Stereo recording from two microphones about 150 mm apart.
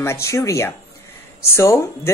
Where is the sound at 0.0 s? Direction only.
20° left (ahead or behind).